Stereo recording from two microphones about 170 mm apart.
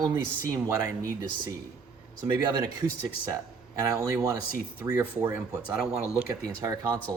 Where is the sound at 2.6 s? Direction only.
20° right (ahead or behind).